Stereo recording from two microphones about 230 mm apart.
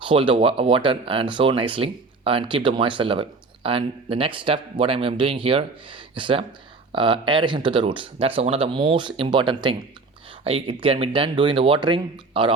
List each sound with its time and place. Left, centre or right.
0.0 s speech: right